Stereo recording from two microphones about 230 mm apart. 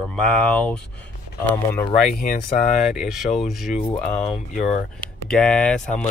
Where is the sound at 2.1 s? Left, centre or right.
Left.